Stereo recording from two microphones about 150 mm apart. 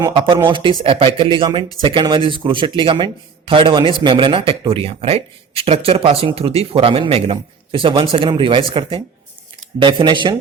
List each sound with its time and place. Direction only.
0.0 s speech: 35° right (ahead or behind)